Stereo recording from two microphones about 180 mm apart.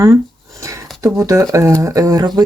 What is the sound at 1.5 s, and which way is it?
Speech, 15° right (ahead or behind).